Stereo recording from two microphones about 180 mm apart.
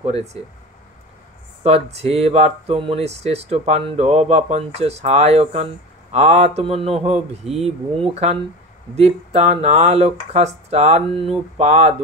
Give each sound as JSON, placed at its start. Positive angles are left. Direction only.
{"t": 1.6, "sound": "speech", "side_deg": -35}